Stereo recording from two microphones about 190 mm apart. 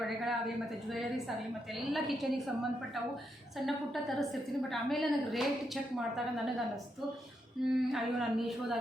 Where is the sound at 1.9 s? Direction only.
Centre (ahead or behind).